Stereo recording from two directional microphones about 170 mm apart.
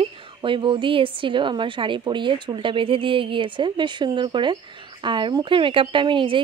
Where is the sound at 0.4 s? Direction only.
30° right (ahead or behind).